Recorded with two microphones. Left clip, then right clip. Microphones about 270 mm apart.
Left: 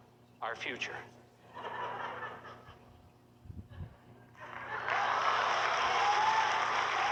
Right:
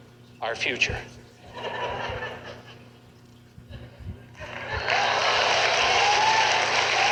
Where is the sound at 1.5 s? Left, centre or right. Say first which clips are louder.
Right 9 dB; centre.